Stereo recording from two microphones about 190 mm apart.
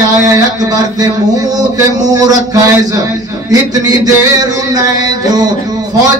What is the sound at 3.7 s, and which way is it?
Speech, 20° right (ahead or behind).